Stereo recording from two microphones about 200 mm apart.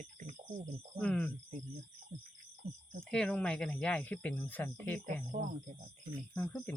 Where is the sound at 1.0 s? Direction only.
5° left (ahead or behind).